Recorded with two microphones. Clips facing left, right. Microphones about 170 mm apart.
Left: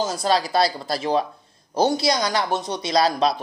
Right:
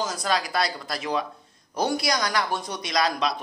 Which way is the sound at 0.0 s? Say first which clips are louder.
Left 5 dB; 30° left (ahead or behind).